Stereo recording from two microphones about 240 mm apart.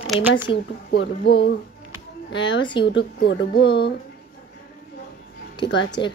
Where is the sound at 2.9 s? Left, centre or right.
Left.